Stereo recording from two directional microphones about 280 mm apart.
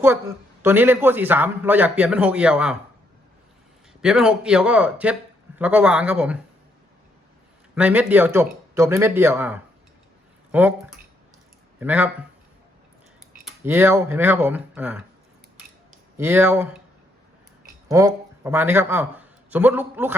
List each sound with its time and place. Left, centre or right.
0.6 s a man's voice: centre
4.0 s speech: centre
7.8 s a man's voice: centre
13.4 s a man's voice: centre
16.1 s a man's voice: centre
17.8 s speech: centre